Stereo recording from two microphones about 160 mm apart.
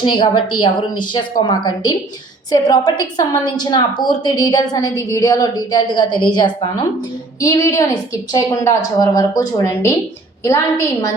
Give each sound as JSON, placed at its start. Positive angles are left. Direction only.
{"t": 0.0, "sound": "a woman's voice", "side_deg": 30}